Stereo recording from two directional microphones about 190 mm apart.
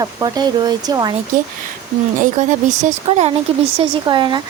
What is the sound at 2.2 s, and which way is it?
Speech, 40° right (ahead or behind).